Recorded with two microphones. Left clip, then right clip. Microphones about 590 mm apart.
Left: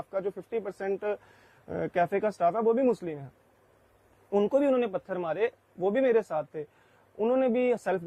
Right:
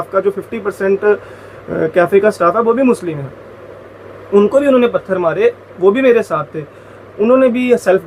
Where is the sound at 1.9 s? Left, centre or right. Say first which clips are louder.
Right 16 dB; left.